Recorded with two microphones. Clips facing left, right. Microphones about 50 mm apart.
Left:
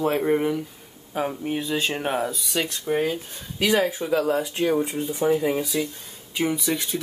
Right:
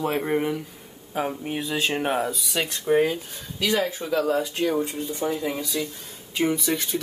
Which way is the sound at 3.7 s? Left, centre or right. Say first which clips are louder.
Left 2 dB; left.